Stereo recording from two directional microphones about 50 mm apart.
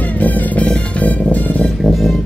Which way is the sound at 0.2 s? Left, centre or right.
Left.